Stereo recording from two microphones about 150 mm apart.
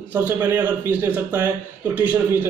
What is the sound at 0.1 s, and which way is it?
Speech, 10° right (ahead or behind).